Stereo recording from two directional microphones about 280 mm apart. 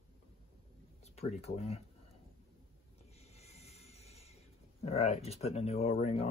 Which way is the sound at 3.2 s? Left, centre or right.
Left.